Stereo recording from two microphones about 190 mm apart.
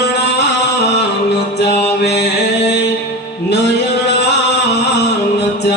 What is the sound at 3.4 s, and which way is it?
Music, 65° left (ahead or behind).